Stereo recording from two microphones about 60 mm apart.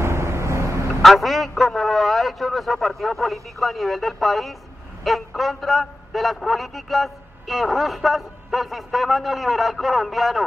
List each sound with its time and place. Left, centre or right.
0.0 s vehicle: right
1.0 s a man's voice: centre